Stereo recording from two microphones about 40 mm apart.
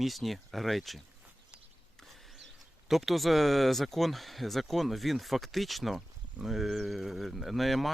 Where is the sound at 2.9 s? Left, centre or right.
Centre.